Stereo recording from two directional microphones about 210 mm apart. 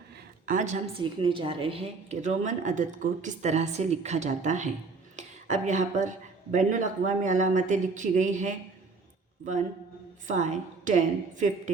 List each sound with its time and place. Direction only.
0.4 s a woman's voice: 35° right (ahead or behind)
1.2 s a woman's voice: 25° right (ahead or behind)
5.1 s a sound: 35° right (ahead or behind)
6.5 s a woman's voice: 35° right (ahead or behind)